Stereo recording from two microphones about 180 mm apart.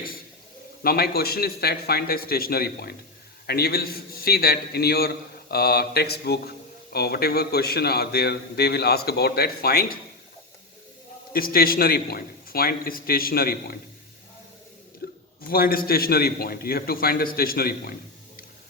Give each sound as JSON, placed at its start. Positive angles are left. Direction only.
{"t": 0.8, "sound": "a man's voice", "side_deg": 60}
{"t": 11.3, "sound": "a man's voice", "side_deg": 55}
{"t": 15.0, "sound": "a sound", "side_deg": 55}
{"t": 15.4, "sound": "a man's voice", "side_deg": 55}